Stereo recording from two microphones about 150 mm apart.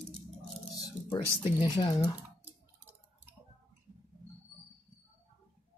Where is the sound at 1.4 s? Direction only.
35° left (ahead or behind).